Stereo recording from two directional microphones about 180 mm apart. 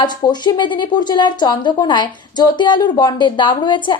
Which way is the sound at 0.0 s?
25° left (ahead or behind).